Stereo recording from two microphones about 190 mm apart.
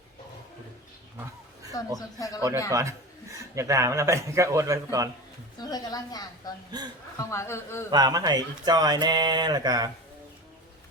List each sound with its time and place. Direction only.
2.0 s a woman's voice: 20° left (ahead or behind)
2.6 s a man's voice: 15° right (ahead or behind)
5.5 s a woman's voice: 20° left (ahead or behind)
6.7 s speech: 20° right (ahead or behind)
7.2 s a man's voice: 15° left (ahead or behind)
7.9 s speech: 20° right (ahead or behind)